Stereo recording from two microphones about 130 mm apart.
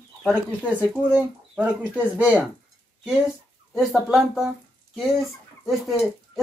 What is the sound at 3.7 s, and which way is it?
Speech, centre (ahead or behind).